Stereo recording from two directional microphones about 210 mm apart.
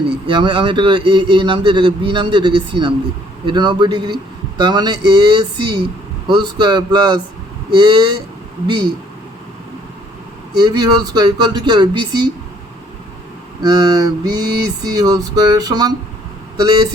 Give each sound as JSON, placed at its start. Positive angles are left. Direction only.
{"t": 0.3, "sound": "a man's voice", "side_deg": -25}
{"t": 10.5, "sound": "a man's voice", "side_deg": -20}
{"t": 13.6, "sound": "a man's voice", "side_deg": -20}